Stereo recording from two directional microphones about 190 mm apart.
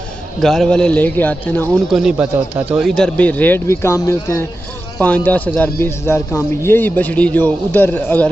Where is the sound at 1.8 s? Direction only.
Centre (ahead or behind).